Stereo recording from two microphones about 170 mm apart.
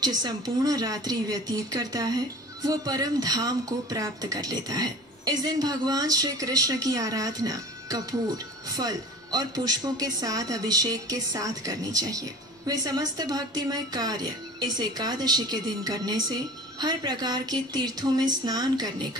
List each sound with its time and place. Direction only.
0.0 s speech: 20° right (ahead or behind)